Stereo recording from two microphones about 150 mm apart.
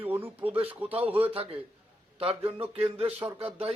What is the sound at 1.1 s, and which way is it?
A man's voice, 40° right (ahead or behind).